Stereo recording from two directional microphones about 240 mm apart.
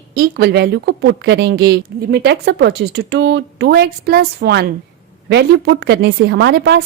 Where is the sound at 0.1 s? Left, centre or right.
Right.